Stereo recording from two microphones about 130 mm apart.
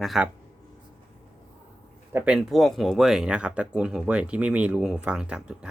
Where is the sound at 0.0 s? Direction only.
Centre (ahead or behind).